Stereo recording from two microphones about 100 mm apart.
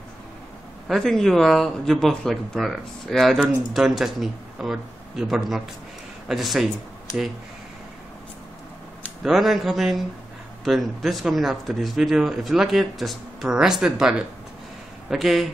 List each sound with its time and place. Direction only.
0.8 s speech: 5° left (ahead or behind)
9.2 s speech: centre (ahead or behind)